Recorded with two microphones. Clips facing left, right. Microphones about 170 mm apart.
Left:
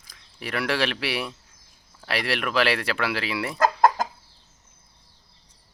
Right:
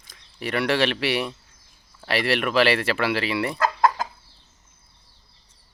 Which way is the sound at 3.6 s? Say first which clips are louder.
Left 4 dB; 40° left (ahead or behind).